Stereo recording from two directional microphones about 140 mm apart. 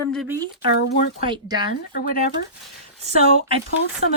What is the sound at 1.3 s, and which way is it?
Speech, 30° right (ahead or behind).